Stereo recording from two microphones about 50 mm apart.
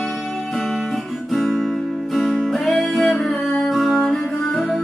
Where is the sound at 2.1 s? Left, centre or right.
Centre.